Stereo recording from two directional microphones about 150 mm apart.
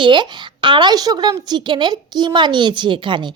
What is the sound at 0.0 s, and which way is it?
A woman's voice, 30° right (ahead or behind).